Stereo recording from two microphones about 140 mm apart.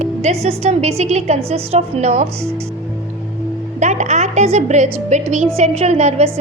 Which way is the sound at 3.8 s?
55° right (ahead or behind).